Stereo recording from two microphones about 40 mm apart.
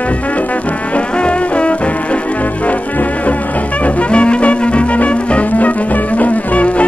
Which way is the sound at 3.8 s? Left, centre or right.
Left.